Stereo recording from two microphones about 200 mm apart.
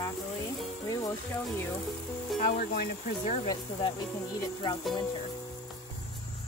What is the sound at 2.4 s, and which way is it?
Speech, 50° left (ahead or behind).